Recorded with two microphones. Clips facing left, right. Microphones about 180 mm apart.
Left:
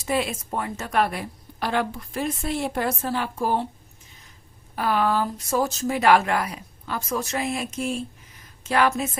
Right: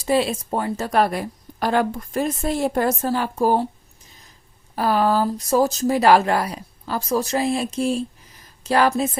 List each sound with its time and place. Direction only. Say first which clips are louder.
0.0 s speech: right 5 dB; 30° right (ahead or behind)
4.7 s speech: right 4 dB; 35° right (ahead or behind)